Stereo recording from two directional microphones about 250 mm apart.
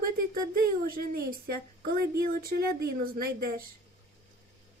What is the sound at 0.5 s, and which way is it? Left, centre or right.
Speech, right.